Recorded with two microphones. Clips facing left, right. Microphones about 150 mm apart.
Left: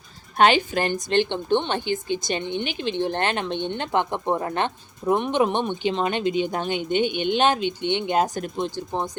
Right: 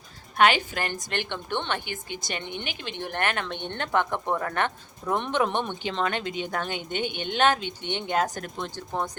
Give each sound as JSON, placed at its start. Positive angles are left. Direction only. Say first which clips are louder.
{"t": 0.3, "sound": "speech", "louder": "left 4 dB", "side_deg": 25}
{"t": 5.1, "sound": "speech", "louder": "left 4 dB", "side_deg": 10}